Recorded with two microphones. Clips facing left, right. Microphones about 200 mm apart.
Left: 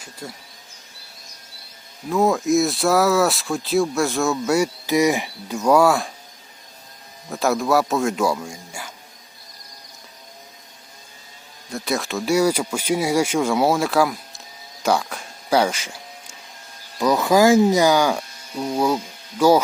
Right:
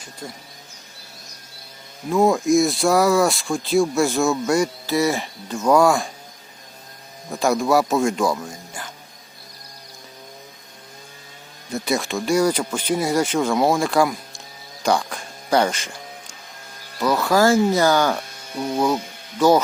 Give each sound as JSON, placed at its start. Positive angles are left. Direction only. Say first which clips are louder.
{"t": 0.0, "sound": "speech", "louder": "even", "side_deg": 5}
{"t": 2.0, "sound": "speech", "louder": "right 1 dB", "side_deg": 0}
{"t": 7.3, "sound": "speech", "louder": "right 1 dB", "side_deg": 0}
{"t": 11.7, "sound": "speech", "louder": "right 2 dB", "side_deg": 0}
{"t": 14.8, "sound": "music", "louder": "even", "side_deg": 5}
{"t": 17.1, "sound": "speech", "louder": "left 2 dB", "side_deg": 20}
{"t": 19.4, "sound": "speech", "louder": "even", "side_deg": 10}